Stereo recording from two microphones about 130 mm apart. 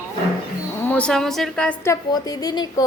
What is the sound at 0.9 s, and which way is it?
Speech, 10° left (ahead or behind).